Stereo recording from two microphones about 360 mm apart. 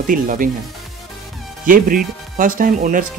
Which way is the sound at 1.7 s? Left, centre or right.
Right.